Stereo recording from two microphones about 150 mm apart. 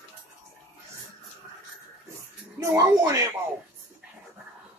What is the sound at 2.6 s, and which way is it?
Speech, 25° right (ahead or behind).